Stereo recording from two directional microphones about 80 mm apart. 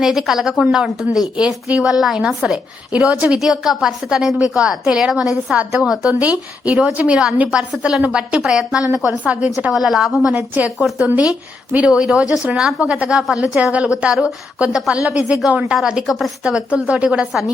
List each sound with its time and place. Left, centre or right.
0.0 s a woman's voice: centre
9.7 s a woman's voice: centre
10.3 s a woman's voice: centre